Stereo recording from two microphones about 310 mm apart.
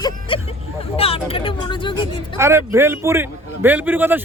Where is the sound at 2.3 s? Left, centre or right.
Centre.